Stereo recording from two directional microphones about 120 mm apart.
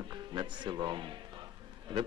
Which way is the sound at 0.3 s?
40° right (ahead or behind).